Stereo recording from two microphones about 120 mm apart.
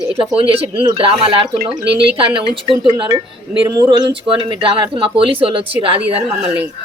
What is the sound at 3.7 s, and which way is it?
Speech, 35° right (ahead or behind).